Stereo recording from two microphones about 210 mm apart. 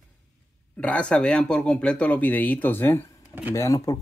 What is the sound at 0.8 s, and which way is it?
Speech, 5° left (ahead or behind).